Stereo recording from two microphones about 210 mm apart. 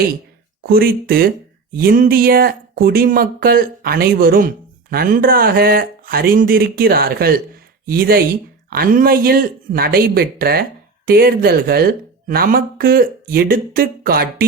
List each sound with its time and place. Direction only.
0.6 s speech: 45° right (ahead or behind)